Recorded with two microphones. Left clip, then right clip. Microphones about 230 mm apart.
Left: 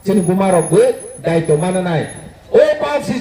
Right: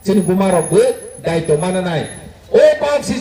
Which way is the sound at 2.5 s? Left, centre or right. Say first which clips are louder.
Right 1 dB; right.